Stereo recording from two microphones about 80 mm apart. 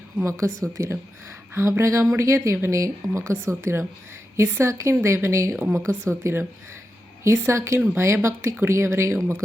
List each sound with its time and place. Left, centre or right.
0.3 s a woman's voice: right